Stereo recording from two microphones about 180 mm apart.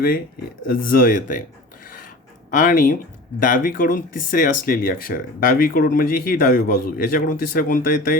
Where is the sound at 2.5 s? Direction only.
50° left (ahead or behind).